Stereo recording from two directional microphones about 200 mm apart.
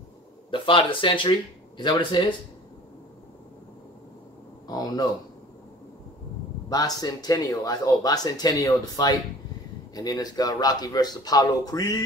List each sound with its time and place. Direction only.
0.5 s speech: 25° left (ahead or behind)
4.6 s speech: 20° left (ahead or behind)
6.7 s speech: 20° left (ahead or behind)